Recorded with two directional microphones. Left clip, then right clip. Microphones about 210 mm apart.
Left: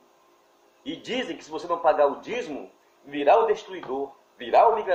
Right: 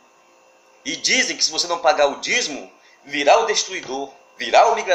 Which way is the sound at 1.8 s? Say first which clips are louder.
Right 4 dB; centre (ahead or behind).